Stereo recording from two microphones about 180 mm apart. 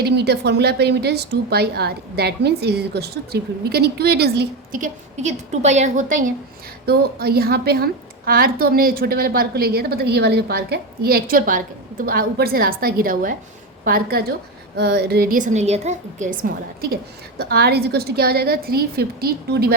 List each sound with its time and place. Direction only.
0.0 s a woman's voice: 65° right (ahead or behind); by 6.3 s 45° right (ahead or behind)
6.8 s a woman's voice: 60° right (ahead or behind)